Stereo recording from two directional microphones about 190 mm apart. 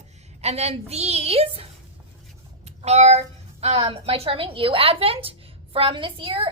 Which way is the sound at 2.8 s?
35° right (ahead or behind).